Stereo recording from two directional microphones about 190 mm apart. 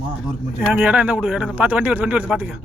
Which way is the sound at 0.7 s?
5° right (ahead or behind).